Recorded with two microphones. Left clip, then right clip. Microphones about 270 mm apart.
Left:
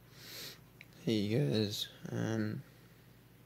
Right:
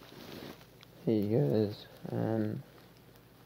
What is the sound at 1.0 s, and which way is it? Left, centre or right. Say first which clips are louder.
Speech: right 4 dB; centre.